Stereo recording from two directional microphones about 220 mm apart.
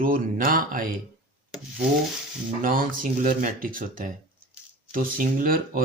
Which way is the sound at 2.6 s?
40° right (ahead or behind).